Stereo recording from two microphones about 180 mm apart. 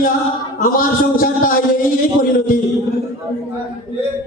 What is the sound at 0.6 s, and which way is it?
Speech, 50° left (ahead or behind).